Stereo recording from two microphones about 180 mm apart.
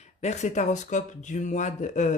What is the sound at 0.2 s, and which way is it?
Speech, 40° left (ahead or behind).